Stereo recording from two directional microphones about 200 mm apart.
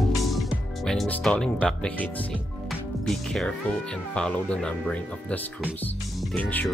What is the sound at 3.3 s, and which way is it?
Speech, 5° left (ahead or behind).